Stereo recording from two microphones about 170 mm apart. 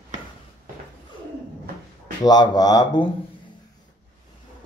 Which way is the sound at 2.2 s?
25° left (ahead or behind).